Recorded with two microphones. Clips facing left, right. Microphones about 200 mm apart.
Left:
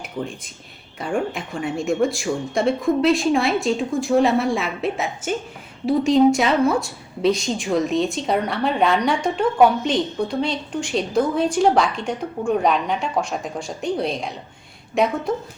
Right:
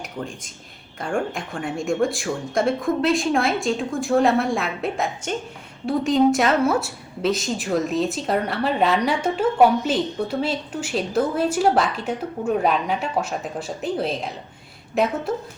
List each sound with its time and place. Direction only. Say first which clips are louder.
0.0 s a woman's voice: left 3 dB; centre (ahead or behind)